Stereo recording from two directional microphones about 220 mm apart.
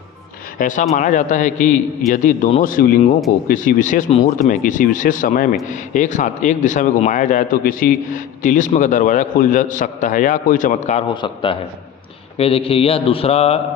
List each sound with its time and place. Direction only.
0.6 s a man's voice: 35° left (ahead or behind)